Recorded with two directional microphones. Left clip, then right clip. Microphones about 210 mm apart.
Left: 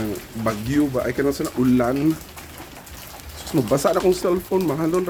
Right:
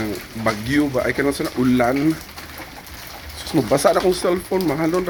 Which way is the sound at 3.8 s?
5° left (ahead or behind).